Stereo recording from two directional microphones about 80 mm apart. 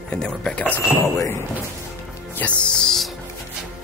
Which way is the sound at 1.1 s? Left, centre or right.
Left.